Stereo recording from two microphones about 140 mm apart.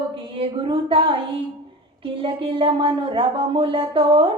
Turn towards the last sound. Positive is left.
turn(degrees=-40)  # may be behind; listen again after turning